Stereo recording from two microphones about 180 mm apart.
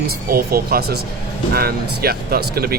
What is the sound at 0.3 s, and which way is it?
Speech, 55° right (ahead or behind).